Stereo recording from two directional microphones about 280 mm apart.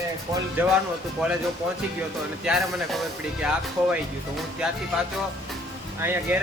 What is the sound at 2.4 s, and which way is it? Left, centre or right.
Speech, centre.